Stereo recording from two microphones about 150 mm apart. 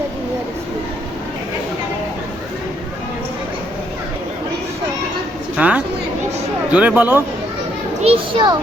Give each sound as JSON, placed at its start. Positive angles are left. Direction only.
{"t": 5.5, "sound": "chatter", "side_deg": -10}
{"t": 6.7, "sound": "speech", "side_deg": -10}
{"t": 8.0, "sound": "a child's voice", "side_deg": -35}